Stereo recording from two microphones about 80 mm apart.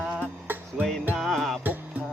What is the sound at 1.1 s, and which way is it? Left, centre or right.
Music, centre.